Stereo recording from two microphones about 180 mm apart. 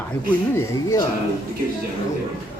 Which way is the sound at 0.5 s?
20° left (ahead or behind).